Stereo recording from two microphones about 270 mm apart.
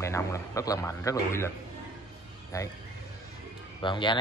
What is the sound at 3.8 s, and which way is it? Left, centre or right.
Speech, centre.